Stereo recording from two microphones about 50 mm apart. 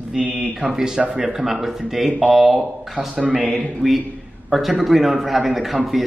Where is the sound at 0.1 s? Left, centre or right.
Centre.